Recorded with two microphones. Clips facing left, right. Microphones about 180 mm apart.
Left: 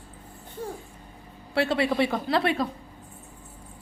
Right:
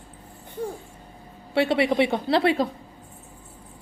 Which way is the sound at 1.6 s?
25° right (ahead or behind).